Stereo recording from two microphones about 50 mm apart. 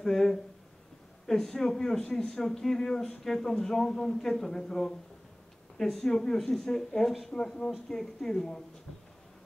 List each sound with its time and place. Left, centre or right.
0.0 s a sound: centre
1.2 s a man's voice: centre
7.1 s speech: centre
7.3 s a man's voice: centre